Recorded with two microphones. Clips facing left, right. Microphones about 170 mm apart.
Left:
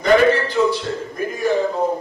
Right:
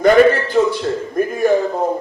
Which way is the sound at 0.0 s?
50° right (ahead or behind).